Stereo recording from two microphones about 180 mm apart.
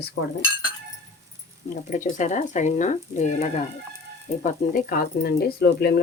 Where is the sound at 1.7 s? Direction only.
45° left (ahead or behind).